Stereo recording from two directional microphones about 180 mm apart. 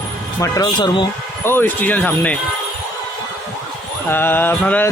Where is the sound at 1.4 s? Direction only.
10° left (ahead or behind).